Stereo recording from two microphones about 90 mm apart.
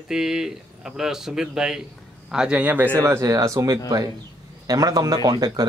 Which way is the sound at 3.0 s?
35° right (ahead or behind).